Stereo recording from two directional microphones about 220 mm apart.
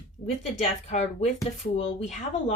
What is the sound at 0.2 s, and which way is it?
A woman's voice, 30° left (ahead or behind).